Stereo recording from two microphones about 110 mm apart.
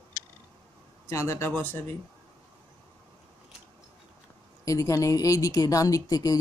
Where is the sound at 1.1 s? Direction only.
25° left (ahead or behind).